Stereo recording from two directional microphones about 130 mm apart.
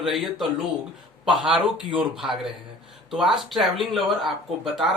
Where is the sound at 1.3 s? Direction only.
35° right (ahead or behind).